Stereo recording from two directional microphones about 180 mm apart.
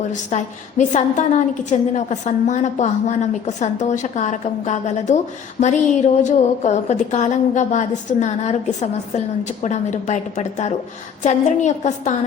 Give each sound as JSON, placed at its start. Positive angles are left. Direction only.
{"t": 0.1, "sound": "a woman's voice", "side_deg": 40}